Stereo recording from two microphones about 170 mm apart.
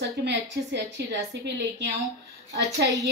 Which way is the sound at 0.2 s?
90° right.